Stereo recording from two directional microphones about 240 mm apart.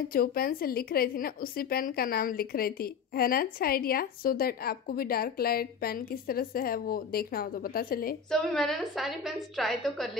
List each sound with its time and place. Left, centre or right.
0.1 s a woman's voice: left
8.3 s a woman's voice: centre